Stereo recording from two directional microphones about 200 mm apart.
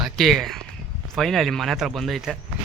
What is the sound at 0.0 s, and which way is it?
Speech, centre (ahead or behind).